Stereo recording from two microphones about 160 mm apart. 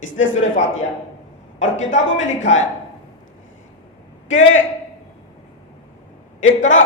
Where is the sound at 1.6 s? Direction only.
50° left (ahead or behind).